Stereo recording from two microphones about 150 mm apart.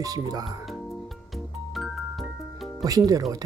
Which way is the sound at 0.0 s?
25° right (ahead or behind).